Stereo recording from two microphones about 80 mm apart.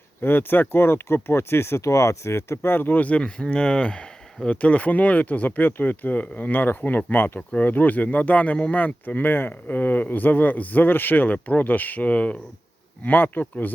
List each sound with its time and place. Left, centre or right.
0.2 s speech: left